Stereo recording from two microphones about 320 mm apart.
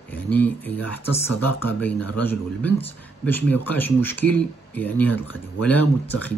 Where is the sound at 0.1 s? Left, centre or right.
Centre.